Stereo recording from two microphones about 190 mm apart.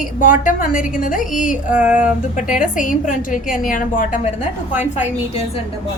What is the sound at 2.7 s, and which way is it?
A woman's voice, 45° left (ahead or behind).